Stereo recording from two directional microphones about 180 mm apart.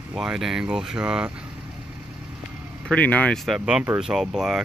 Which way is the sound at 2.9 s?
10° left (ahead or behind).